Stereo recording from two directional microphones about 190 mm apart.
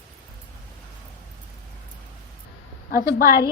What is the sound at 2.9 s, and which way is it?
Speech, 50° left (ahead or behind).